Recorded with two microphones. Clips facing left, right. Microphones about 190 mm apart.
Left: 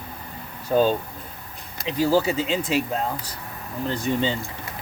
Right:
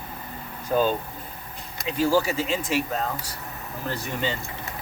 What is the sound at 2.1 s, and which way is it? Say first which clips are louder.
Speech: left 2 dB; 20° left (ahead or behind).